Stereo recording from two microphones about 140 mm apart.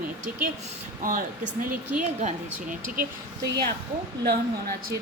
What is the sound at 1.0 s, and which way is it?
Speech, 75° right (ahead or behind).